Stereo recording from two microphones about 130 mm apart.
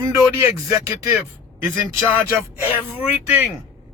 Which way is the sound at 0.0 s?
20° right (ahead or behind).